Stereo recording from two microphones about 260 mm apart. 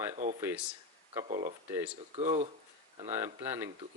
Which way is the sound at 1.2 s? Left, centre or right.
Right.